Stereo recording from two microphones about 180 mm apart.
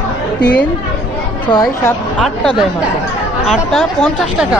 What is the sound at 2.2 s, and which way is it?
Speech, 5° left (ahead or behind).